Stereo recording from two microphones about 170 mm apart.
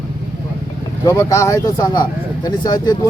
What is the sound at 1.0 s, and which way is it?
Speech, 20° left (ahead or behind).